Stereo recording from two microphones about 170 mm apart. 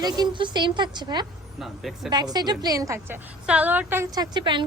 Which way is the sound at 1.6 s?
Centre (ahead or behind).